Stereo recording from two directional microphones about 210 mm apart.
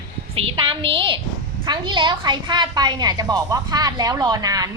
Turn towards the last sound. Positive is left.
turn(degrees=-15)  # may be behind; listen again after turning